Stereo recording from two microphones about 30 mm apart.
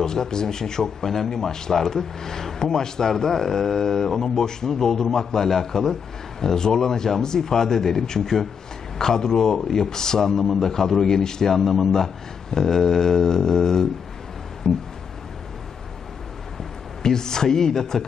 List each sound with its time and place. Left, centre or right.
0.0 s a man's voice: centre
11.1 s a man's voice: left
16.5 s speech: centre